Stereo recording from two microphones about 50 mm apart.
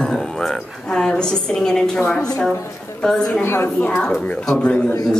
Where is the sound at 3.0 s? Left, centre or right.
Centre.